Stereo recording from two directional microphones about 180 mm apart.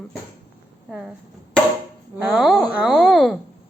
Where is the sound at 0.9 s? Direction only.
Centre (ahead or behind).